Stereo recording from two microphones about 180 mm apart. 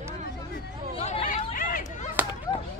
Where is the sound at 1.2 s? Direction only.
50° left (ahead or behind).